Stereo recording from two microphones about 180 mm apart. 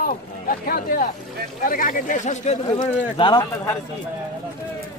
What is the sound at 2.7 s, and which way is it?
Speech, 25° left (ahead or behind).